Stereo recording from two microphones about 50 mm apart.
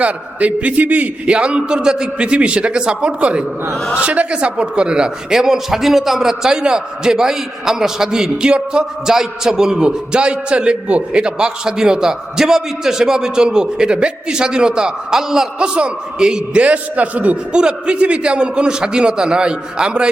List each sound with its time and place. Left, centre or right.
0.0 s a man's voice: right
1.2 s a man's voice: centre
16.6 s a man's voice: right